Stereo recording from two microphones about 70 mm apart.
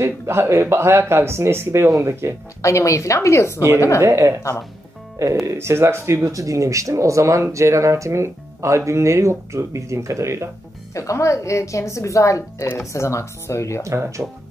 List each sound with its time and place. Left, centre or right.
0.0 s speech: right
2.6 s a woman's voice: left
4.0 s speech: right
4.4 s a woman's voice: left
5.5 s speech: right
11.0 s a woman's voice: left
13.8 s speech: right